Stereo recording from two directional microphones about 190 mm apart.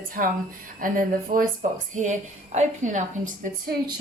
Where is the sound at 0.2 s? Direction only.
45° right (ahead or behind).